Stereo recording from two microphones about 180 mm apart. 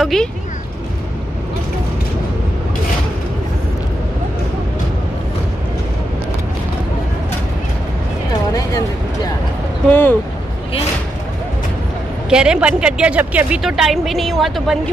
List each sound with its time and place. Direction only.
0.0 s speech: centre (ahead or behind)
8.5 s a sound: 20° left (ahead or behind)
9.8 s vehicle: 10° left (ahead or behind)
12.3 s speech: 5° right (ahead or behind)